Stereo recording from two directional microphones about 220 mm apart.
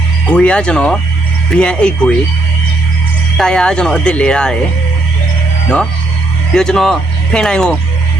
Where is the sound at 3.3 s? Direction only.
5° left (ahead or behind).